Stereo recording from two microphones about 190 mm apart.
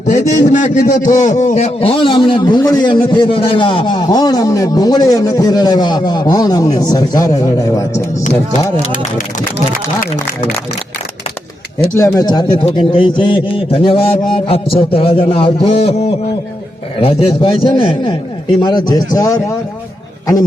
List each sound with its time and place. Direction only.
0.6 s a man's voice: 40° left (ahead or behind); by 7.9 s 20° left (ahead or behind)
9.7 s speech: 45° left (ahead or behind)
11.9 s a man's voice: 15° left (ahead or behind)